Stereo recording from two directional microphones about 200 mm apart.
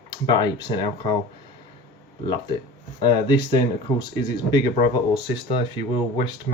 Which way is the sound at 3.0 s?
20° left (ahead or behind).